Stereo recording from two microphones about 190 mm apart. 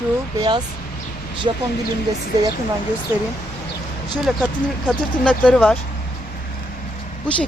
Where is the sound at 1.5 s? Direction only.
30° right (ahead or behind).